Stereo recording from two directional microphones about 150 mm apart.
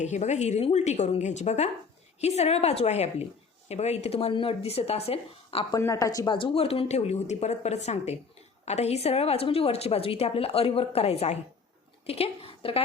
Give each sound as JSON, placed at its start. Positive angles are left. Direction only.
{"t": 0.0, "sound": "speech", "side_deg": 50}
{"t": 5.8, "sound": "speech", "side_deg": 25}
{"t": 6.3, "sound": "a woman's voice", "side_deg": 40}